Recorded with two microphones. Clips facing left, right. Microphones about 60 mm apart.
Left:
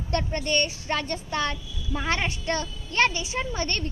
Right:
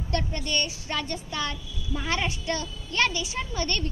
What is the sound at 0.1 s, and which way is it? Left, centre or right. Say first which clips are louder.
Speech: left 3 dB; left.